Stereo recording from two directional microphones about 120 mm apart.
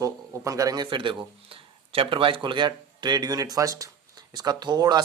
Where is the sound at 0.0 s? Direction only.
25° right (ahead or behind).